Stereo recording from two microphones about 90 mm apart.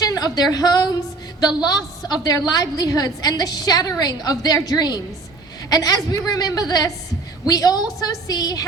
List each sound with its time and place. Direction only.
0.0 s a woman's voice: 40° left (ahead or behind)